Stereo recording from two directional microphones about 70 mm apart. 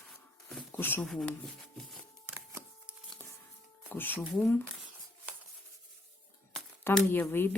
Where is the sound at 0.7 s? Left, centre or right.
Left.